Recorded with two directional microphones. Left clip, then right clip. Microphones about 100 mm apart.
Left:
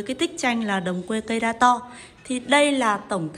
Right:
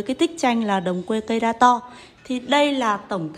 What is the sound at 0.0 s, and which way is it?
A woman's voice, 50° right (ahead or behind).